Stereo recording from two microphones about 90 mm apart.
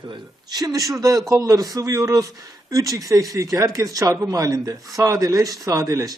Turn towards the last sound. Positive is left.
turn(degrees=-40)  # may be behind; listen again after turning